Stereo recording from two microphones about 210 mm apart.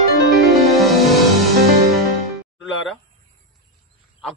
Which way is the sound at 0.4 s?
Centre (ahead or behind).